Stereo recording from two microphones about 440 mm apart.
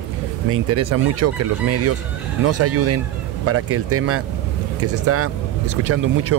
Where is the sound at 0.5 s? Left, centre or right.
Right.